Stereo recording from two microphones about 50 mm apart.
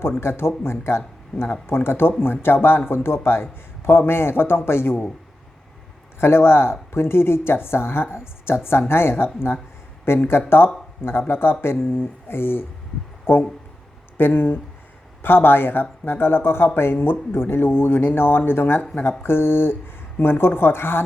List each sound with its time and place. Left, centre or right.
0.2 s speech: left
6.1 s speech: left